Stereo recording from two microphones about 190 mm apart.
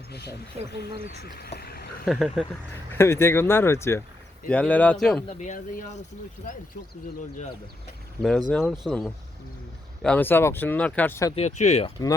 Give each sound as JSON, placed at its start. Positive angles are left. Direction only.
{"t": 0.1, "sound": "speech", "side_deg": 60}
{"t": 2.0, "sound": "speech", "side_deg": 0}
{"t": 2.9, "sound": "speech", "side_deg": 15}
{"t": 5.4, "sound": "speech", "side_deg": 40}
{"t": 8.2, "sound": "speech", "side_deg": 0}
{"t": 11.3, "sound": "speech", "side_deg": 35}